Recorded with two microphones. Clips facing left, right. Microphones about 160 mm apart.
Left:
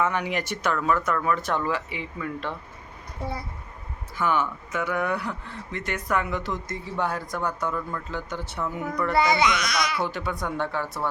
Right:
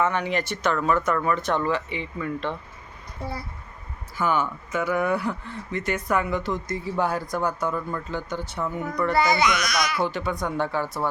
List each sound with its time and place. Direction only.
0.0 s speech: 10° left (ahead or behind)
4.2 s speech: centre (ahead or behind)
9.1 s speech: 25° left (ahead or behind)
10.0 s speech: centre (ahead or behind)